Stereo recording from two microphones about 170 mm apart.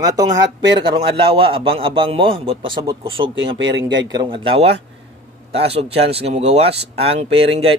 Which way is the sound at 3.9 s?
25° right (ahead or behind).